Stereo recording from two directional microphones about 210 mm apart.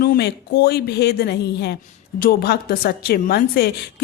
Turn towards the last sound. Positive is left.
turn(degrees=50)  # may be behind; listen again after turning